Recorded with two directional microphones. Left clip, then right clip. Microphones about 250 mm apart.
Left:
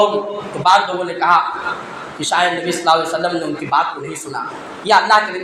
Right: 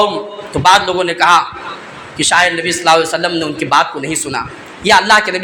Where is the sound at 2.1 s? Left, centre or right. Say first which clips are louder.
Right 5 dB; right.